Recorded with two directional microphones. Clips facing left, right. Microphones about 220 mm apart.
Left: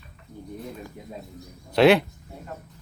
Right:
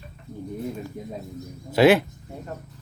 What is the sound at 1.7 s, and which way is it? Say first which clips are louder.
Speech: even; 5° right (ahead or behind).